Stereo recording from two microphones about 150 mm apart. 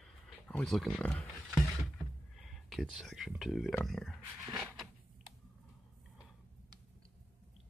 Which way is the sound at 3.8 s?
Centre (ahead or behind).